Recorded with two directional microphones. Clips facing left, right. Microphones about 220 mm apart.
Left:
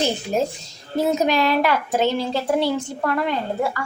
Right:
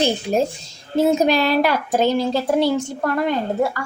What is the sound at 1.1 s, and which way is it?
Speech, 35° right (ahead or behind).